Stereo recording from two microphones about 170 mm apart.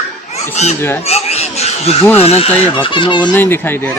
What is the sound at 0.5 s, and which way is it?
Speech, 40° left (ahead or behind).